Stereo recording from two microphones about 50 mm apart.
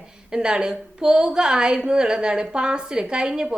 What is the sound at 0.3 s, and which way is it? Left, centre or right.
A woman's voice, centre.